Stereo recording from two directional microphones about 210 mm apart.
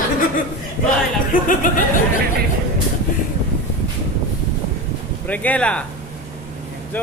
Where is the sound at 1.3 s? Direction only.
40° left (ahead or behind).